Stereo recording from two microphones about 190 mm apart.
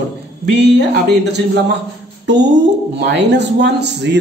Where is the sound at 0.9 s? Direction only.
60° right (ahead or behind).